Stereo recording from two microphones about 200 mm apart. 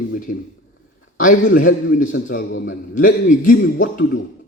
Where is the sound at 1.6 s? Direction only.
45° left (ahead or behind).